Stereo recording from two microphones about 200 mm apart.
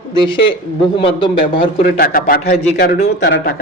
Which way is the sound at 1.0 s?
25° left (ahead or behind).